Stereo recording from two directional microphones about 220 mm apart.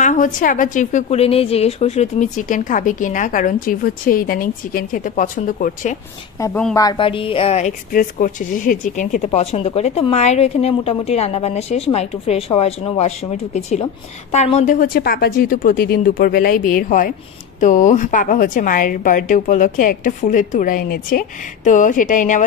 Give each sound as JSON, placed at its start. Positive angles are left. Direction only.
{"t": 0.0, "sound": "a woman's voice", "side_deg": 35}
{"t": 6.4, "sound": "a woman's voice", "side_deg": 10}